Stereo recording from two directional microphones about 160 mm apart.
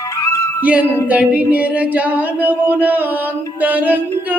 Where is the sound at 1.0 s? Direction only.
10° right (ahead or behind).